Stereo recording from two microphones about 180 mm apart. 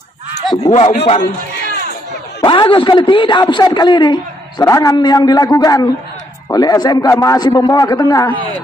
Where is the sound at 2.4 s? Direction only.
25° left (ahead or behind); by 8.5 s 10° left (ahead or behind).